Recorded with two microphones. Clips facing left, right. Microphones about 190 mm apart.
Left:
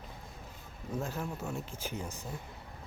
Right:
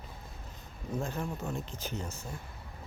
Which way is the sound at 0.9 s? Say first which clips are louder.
Right 1 dB; 5° left (ahead or behind).